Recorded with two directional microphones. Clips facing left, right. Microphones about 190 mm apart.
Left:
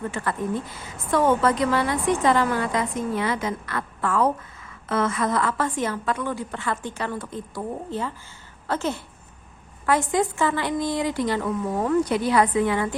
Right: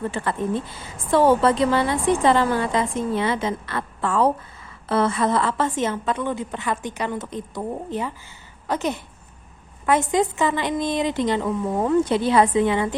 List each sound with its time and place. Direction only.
0.1 s a woman's voice: 25° right (ahead or behind)